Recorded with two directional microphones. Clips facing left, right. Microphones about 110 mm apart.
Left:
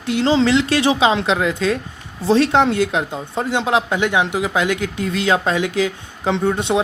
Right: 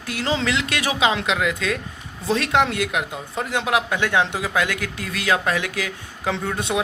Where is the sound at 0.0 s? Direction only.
25° left (ahead or behind).